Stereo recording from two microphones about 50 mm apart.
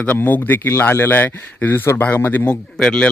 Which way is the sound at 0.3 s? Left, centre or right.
Left.